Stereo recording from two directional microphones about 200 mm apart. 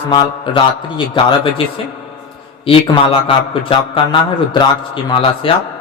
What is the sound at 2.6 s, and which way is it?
A man's voice, 25° left (ahead or behind).